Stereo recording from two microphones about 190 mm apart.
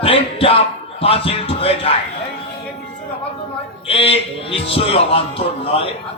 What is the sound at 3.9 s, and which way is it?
Speech, 30° left (ahead or behind).